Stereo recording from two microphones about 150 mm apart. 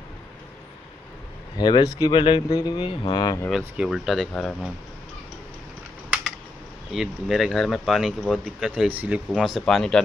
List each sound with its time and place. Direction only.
1.6 s speech: 30° left (ahead or behind)
3.4 s speech: 5° right (ahead or behind)
6.9 s speech: centre (ahead or behind)